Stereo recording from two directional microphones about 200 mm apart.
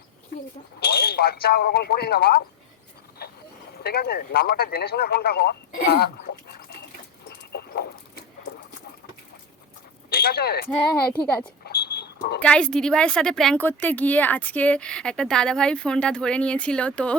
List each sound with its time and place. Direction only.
0.8 s speech: 50° left (ahead or behind)
3.2 s a sound: 50° left (ahead or behind)
3.8 s speech: 50° left (ahead or behind)
7.3 s dog: 50° left (ahead or behind)
10.1 s speech: 50° left (ahead or behind)
11.1 s speech: 20° left (ahead or behind)
11.6 s a sound: 50° left (ahead or behind)
12.4 s a woman's voice: 5° left (ahead or behind)